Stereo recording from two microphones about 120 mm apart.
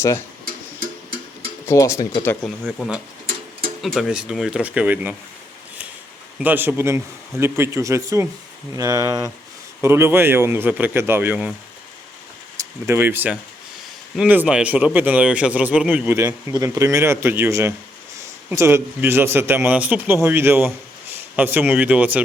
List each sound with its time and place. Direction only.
0.0 s speech: 25° left (ahead or behind)
1.6 s speech: 25° left (ahead or behind)
2.6 s speech: 5° left (ahead or behind); by 5.1 s 15° right (ahead or behind)
6.4 s a man's voice: 15° right (ahead or behind)
12.5 s speech: 25° right (ahead or behind)
16.1 s a man's voice: 25° right (ahead or behind); by 22.2 s 10° right (ahead or behind)